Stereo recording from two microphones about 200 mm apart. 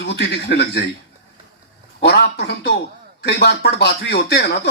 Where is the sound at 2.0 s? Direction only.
60° left (ahead or behind).